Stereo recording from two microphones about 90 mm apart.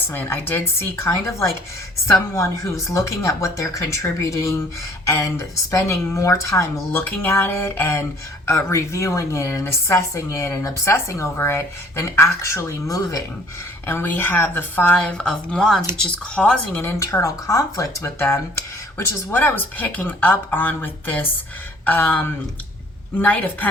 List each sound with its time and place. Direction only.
0.1 s speech: 20° left (ahead or behind)
6.9 s speech: 15° left (ahead or behind); by 13.1 s 35° left (ahead or behind)
13.8 s speech: 25° left (ahead or behind)
16.8 s speech: 35° left (ahead or behind); by 23.6 s 20° left (ahead or behind)